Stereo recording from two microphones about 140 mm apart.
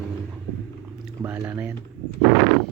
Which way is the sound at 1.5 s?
10° right (ahead or behind).